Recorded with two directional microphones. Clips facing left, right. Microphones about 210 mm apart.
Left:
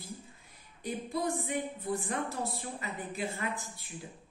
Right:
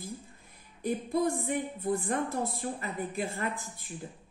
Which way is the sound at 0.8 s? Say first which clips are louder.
Right 5 dB; 50° right (ahead or behind).